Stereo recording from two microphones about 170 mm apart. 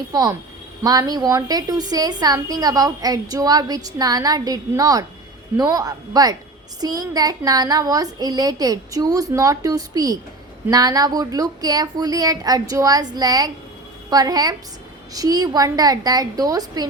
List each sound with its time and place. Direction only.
0.1 s a woman's voice: 20° right (ahead or behind)